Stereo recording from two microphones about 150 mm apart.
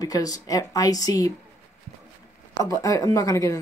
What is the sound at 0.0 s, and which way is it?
Speech, 25° left (ahead or behind).